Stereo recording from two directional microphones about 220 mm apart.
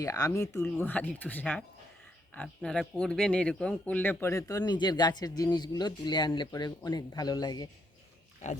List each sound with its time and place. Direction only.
0.0 s speech: 15° left (ahead or behind)